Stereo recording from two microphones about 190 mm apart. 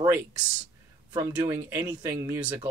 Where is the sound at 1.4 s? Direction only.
15° right (ahead or behind).